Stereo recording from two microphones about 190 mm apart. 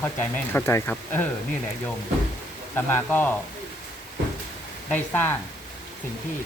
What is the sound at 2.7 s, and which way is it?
Speech, 10° left (ahead or behind).